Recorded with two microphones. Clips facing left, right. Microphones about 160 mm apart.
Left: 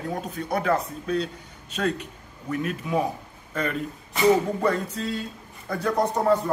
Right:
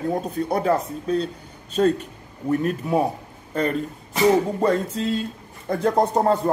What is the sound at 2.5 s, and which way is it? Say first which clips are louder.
A man's voice: right 5 dB; 40° right (ahead or behind).